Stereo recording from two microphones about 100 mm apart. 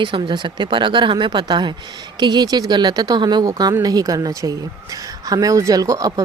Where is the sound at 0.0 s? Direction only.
55° right (ahead or behind).